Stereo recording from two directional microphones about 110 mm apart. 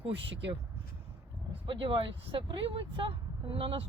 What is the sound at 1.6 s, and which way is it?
Speech, 50° right (ahead or behind).